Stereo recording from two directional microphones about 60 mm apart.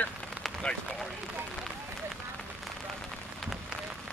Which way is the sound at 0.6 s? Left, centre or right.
Centre.